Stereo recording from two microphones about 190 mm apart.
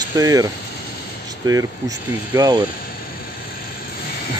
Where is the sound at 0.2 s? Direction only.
20° right (ahead or behind).